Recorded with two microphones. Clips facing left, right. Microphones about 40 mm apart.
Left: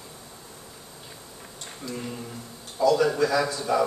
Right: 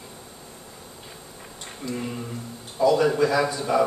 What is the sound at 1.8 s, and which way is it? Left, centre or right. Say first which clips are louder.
Speech: right 4 dB; centre.